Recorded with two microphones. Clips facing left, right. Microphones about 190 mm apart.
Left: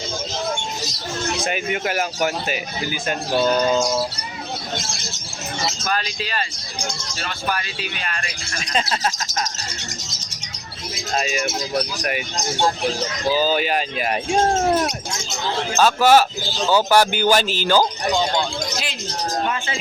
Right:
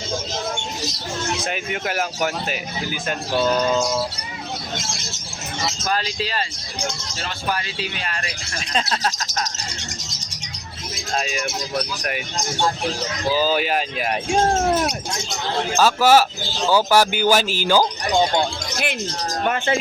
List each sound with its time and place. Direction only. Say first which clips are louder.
1.5 s speech: left 2 dB; 5° left (ahead or behind)
5.8 s speech: right 1 dB; 30° right (ahead or behind)
8.7 s speech: left 1 dB; 5° left (ahead or behind)
11.1 s speech: left 2 dB; 5° left (ahead or behind)
13.3 s speech: even; 5° right (ahead or behind)
15.8 s speech: left 1 dB; 10° right (ahead or behind)
18.1 s music: right 2 dB; 55° right (ahead or behind)
19.5 s speech: right 5 dB; 60° right (ahead or behind)